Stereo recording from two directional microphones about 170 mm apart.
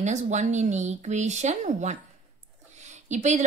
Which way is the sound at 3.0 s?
45° right (ahead or behind).